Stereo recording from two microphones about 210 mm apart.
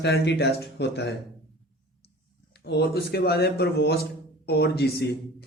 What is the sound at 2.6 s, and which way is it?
Speech, 50° left (ahead or behind).